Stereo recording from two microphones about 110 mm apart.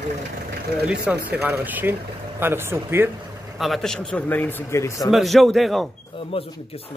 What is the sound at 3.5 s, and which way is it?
A man's voice, centre (ahead or behind).